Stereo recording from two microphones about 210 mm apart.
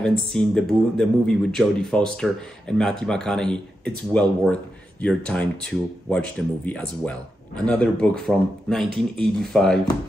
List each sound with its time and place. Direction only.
0.0 s speech: 5° left (ahead or behind)